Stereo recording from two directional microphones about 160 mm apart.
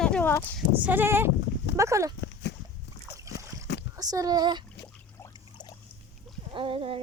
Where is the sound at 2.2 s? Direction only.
90° left.